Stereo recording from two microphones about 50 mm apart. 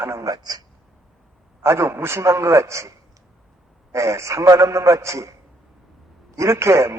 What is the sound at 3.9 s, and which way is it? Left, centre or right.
A man's voice, right.